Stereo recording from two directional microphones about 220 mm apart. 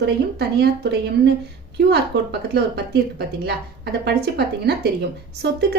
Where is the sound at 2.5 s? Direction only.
50° right (ahead or behind).